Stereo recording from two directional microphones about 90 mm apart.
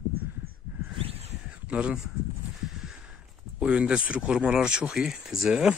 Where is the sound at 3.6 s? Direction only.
10° right (ahead or behind).